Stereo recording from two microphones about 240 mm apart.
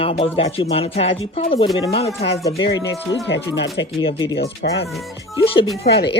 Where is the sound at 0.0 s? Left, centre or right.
Left.